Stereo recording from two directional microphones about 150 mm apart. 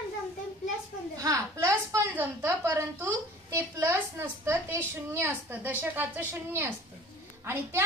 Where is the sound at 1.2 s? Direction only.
20° right (ahead or behind).